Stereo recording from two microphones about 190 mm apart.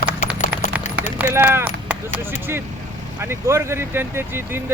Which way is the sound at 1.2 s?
10° right (ahead or behind).